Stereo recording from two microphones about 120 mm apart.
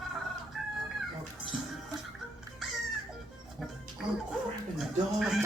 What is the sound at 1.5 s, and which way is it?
Music, 5° right (ahead or behind).